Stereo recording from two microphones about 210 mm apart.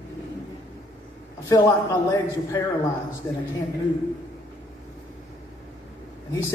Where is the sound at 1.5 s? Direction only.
15° left (ahead or behind).